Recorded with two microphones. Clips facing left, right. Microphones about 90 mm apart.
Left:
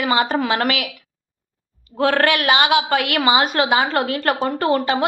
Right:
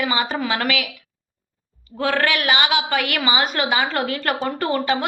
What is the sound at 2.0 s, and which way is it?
A woman's voice, 45° left (ahead or behind).